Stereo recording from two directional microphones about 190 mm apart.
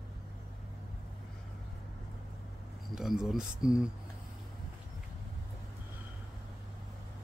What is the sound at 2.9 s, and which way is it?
Speech, centre (ahead or behind).